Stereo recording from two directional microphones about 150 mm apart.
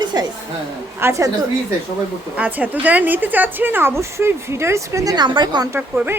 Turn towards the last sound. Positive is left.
turn(degrees=-10)  # may be behind; listen again after turning